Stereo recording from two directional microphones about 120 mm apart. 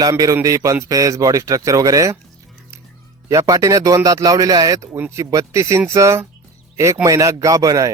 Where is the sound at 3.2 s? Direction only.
30° right (ahead or behind).